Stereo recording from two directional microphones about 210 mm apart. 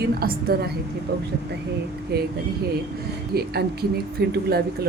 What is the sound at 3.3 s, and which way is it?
A woman's voice, 50° right (ahead or behind).